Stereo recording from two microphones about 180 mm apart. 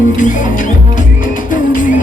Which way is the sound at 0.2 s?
45° left (ahead or behind).